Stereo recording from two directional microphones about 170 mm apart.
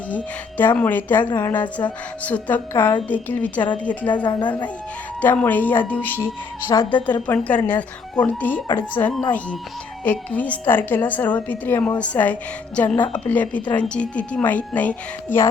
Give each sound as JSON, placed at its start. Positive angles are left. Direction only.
{"t": 0.1, "sound": "a woman's voice", "side_deg": 10}
{"t": 4.1, "sound": "a woman's voice", "side_deg": 25}
{"t": 5.2, "sound": "a woman's voice", "side_deg": 10}
{"t": 6.7, "sound": "a woman's voice", "side_deg": 30}
{"t": 7.1, "sound": "a woman's voice", "side_deg": 10}